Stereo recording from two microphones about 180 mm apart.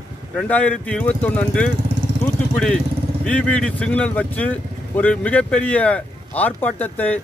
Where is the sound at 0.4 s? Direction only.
10° left (ahead or behind).